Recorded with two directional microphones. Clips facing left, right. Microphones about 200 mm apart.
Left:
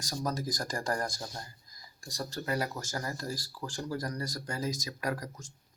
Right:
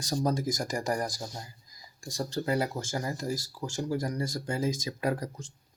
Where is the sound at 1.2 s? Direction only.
10° right (ahead or behind).